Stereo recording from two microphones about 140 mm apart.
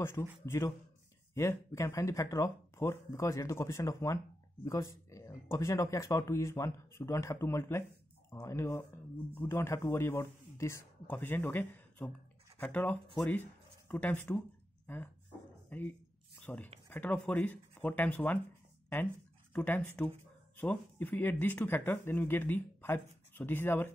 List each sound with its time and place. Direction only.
0.2 s speech: 15° left (ahead or behind)
15.7 s speech: 15° left (ahead or behind)
19.5 s speech: 15° left (ahead or behind)